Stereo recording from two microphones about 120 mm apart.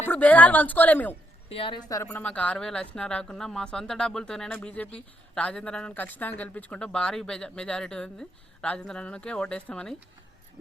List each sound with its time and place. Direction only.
0.0 s speech: 15° left (ahead or behind)
1.5 s a woman's voice: 50° left (ahead or behind)
2.0 s speech: 10° left (ahead or behind)